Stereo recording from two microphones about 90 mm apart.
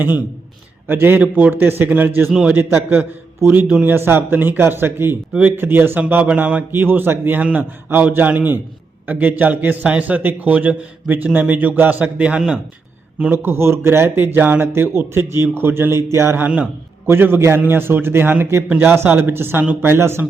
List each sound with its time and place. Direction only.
0.9 s a man's voice: 25° right (ahead or behind)